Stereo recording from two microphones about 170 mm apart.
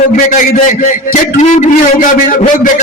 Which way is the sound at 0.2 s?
50° left (ahead or behind).